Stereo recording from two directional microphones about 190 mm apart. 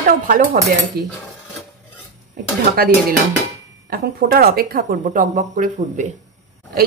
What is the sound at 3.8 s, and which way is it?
A woman's voice, 50° right (ahead or behind).